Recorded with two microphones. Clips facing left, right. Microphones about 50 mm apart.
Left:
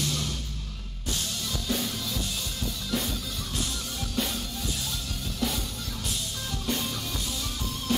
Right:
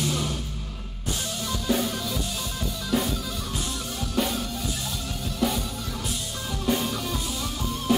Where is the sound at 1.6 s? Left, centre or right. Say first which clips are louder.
Right 6 dB; centre.